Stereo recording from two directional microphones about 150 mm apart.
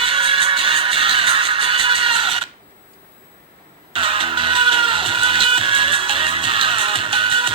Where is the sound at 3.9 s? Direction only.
35° right (ahead or behind).